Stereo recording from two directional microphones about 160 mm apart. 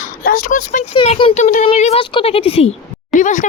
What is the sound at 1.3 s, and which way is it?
Speech, 45° left (ahead or behind).